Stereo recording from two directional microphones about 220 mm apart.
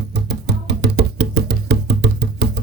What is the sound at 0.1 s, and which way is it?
Music, 50° right (ahead or behind).